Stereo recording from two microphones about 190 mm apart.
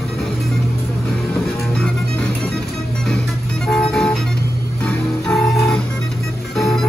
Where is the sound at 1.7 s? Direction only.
5° left (ahead or behind).